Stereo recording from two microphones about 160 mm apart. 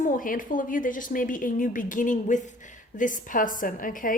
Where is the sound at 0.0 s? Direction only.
60° left (ahead or behind).